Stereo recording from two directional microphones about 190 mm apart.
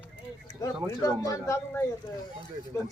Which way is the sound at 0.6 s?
20° left (ahead or behind).